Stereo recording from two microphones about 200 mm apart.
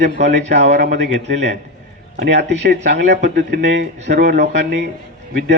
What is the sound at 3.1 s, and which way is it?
A man's voice, 55° right (ahead or behind).